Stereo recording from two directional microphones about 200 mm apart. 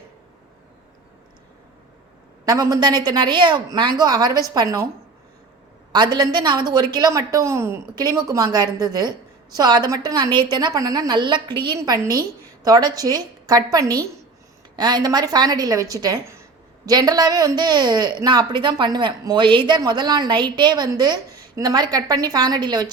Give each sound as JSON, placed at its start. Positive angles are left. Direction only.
{"t": 2.4, "sound": "a woman's voice", "side_deg": -15}
{"t": 5.9, "sound": "a woman's voice", "side_deg": -20}